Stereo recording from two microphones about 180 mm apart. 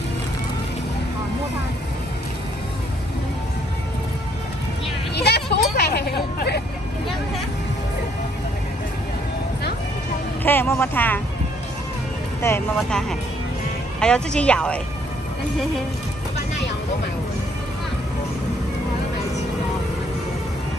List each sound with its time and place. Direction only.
5.1 s vehicle: 65° left (ahead or behind)
10.4 s speech: 10° left (ahead or behind)
12.4 s speech: 15° left (ahead or behind)
12.7 s speech: centre (ahead or behind)